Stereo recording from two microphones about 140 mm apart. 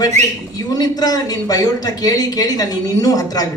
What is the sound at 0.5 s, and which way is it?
Speech, 30° left (ahead or behind).